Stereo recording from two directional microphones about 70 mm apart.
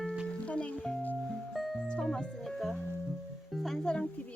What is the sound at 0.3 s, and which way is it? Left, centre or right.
Music, centre.